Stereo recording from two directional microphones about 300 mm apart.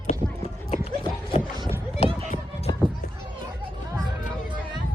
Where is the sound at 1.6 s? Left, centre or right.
Centre.